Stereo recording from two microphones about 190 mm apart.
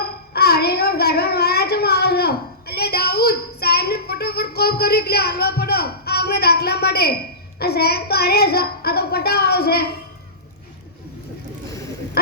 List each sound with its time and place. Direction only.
0.3 s child singing: 55° left (ahead or behind)
7.6 s a child's voice: 55° left (ahead or behind)
12.2 s a sound: 55° left (ahead or behind)